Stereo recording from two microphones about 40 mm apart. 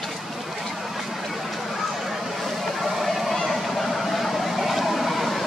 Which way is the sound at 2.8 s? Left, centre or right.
Centre.